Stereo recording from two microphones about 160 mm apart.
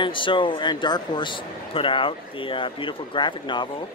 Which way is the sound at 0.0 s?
30° left (ahead or behind).